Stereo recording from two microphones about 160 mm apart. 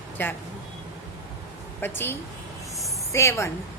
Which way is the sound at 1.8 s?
15° left (ahead or behind).